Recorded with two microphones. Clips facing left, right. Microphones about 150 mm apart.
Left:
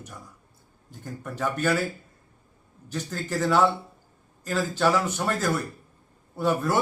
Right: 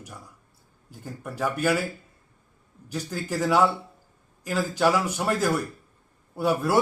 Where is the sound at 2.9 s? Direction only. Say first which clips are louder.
Even; 10° right (ahead or behind).